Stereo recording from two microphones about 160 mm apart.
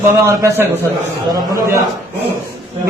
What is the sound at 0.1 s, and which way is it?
Speech, 15° right (ahead or behind).